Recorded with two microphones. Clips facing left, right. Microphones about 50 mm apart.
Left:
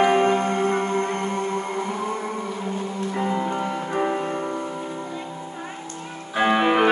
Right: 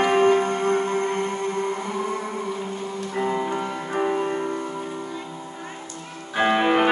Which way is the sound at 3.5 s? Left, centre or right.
Centre.